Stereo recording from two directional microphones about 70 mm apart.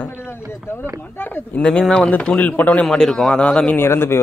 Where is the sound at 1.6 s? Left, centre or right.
Centre.